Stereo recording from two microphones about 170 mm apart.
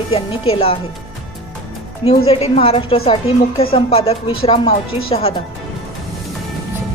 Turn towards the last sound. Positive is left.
turn(degrees=35)  # may be behind; listen again after turning